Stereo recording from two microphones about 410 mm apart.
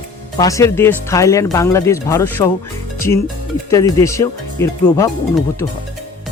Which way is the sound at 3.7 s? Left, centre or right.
Centre.